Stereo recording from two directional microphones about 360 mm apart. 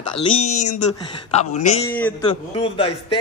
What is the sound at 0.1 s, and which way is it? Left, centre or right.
A man's voice, centre.